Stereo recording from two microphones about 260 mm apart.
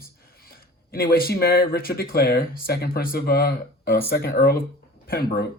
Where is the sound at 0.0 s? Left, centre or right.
Left.